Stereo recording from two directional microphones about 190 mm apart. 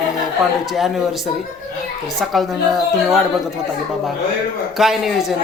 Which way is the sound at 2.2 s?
Centre (ahead or behind).